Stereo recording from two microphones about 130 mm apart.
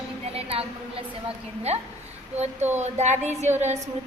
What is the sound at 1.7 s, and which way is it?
A woman's voice, 55° right (ahead or behind).